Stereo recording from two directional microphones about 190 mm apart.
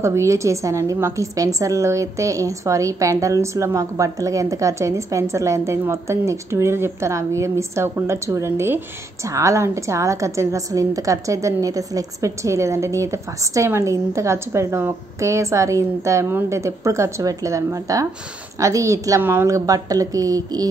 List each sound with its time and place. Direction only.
0.0 s a woman's voice: 15° right (ahead or behind)